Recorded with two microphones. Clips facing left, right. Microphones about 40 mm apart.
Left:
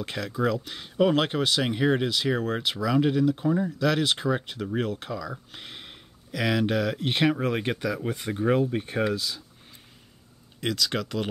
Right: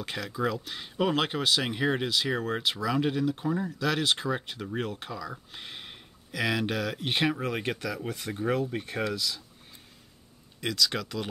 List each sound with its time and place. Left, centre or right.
0.0 s speech: centre
7.3 s speech: left
10.6 s speech: centre